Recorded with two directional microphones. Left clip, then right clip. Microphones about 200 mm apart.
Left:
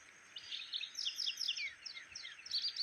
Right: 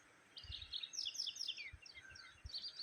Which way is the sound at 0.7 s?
65° right (ahead or behind).